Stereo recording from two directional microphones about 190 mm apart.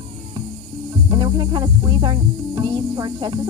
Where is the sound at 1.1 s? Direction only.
20° right (ahead or behind).